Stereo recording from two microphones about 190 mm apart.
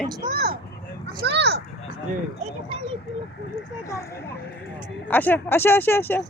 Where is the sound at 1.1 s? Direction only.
60° right (ahead or behind).